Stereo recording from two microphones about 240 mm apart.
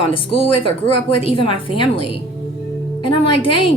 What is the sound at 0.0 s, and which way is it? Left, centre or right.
Speech, left.